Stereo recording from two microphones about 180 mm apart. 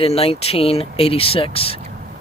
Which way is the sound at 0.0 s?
35° left (ahead or behind).